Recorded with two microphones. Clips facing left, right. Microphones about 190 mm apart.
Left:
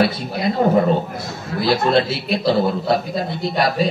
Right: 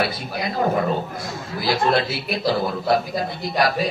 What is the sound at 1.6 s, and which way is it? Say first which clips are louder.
A man's voice: left 4 dB; 25° left (ahead or behind).